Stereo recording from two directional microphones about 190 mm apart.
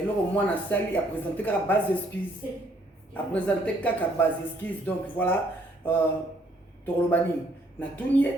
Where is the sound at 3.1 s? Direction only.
5° left (ahead or behind).